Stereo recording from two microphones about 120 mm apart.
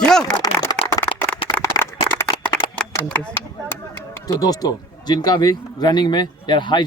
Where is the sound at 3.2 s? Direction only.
20° left (ahead or behind).